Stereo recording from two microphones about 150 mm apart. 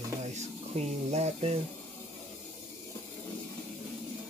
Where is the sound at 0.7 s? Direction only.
45° right (ahead or behind).